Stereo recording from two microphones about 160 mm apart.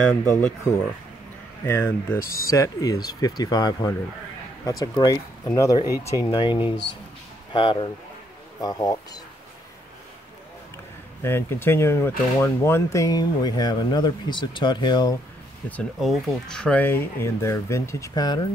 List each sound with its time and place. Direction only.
1.6 s speech: 15° left (ahead or behind)
2.1 s speech: 65° left (ahead or behind)
2.5 s speech: 20° left (ahead or behind)
11.2 s speech: 15° left (ahead or behind)
16.0 s speech: centre (ahead or behind); by 18.5 s 25° left (ahead or behind)